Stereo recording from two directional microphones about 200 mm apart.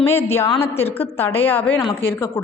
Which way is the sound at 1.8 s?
25° left (ahead or behind).